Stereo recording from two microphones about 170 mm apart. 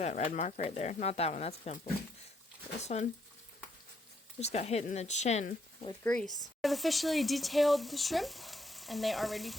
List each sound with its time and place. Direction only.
0.0 s speech: 45° left (ahead or behind)
4.4 s speech: 40° left (ahead or behind)
6.0 s speech: 5° left (ahead or behind)